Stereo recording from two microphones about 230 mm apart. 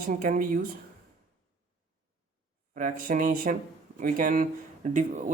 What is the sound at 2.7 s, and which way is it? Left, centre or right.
Speech, right.